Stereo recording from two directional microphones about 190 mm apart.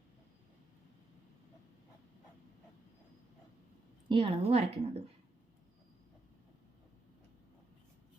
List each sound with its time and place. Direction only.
4.1 s a woman's voice: 30° right (ahead or behind)